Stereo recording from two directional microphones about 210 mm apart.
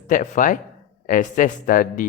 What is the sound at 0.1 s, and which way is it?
Speech, 40° left (ahead or behind).